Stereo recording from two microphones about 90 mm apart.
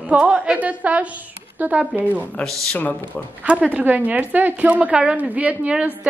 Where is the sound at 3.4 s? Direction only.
15° right (ahead or behind).